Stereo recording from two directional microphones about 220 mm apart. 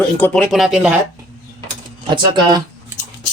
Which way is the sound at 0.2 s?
Centre (ahead or behind).